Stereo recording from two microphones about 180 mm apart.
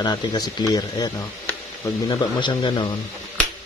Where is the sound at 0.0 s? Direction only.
20° left (ahead or behind).